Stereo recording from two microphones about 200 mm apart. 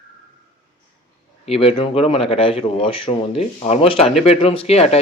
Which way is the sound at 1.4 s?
30° left (ahead or behind).